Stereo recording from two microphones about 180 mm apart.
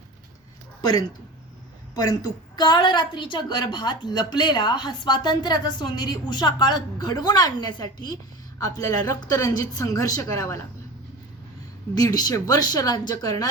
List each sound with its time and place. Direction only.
2.6 s a woman's voice: 25° left (ahead or behind)
11.9 s a woman's voice: 20° left (ahead or behind)